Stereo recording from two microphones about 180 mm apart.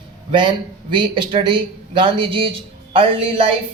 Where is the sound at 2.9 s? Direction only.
30° right (ahead or behind).